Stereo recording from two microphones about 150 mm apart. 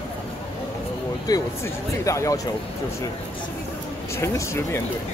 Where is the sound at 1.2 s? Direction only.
20° left (ahead or behind).